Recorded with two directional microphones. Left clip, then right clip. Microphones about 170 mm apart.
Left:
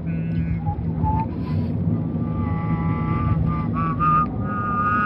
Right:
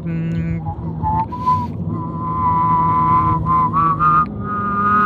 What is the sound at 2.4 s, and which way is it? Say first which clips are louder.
Vehicle: right 19 dB; 45° right (ahead or behind).